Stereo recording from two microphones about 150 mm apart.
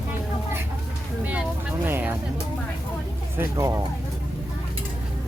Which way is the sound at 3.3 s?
20° right (ahead or behind).